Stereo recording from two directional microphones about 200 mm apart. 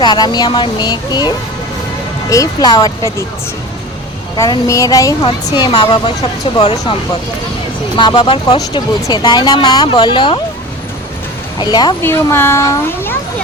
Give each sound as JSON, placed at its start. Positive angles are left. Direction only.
{"t": 0.0, "sound": "speech", "side_deg": 20}
{"t": 2.3, "sound": "a child's voice", "side_deg": 20}
{"t": 4.4, "sound": "speech", "side_deg": 20}
{"t": 7.9, "sound": "speech", "side_deg": 20}
{"t": 11.6, "sound": "a child's voice", "side_deg": 20}